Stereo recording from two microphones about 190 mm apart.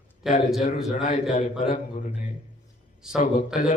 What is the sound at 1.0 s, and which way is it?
A man's voice, 40° left (ahead or behind).